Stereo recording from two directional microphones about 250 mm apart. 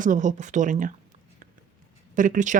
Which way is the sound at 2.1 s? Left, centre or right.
Right.